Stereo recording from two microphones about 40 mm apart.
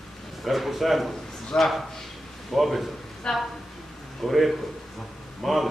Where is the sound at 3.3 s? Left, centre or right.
Centre.